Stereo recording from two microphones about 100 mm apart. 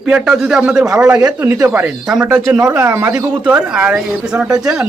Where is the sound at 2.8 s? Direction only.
20° right (ahead or behind).